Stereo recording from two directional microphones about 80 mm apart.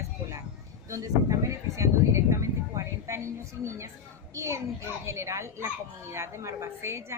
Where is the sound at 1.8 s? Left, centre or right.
Right.